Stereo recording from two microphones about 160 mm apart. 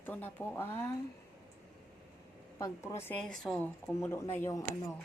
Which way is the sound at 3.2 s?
Centre (ahead or behind).